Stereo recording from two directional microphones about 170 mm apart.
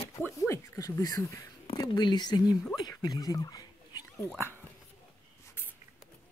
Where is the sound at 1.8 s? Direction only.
25° left (ahead or behind).